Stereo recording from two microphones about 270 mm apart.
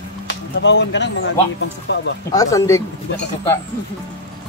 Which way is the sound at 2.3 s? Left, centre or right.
Centre.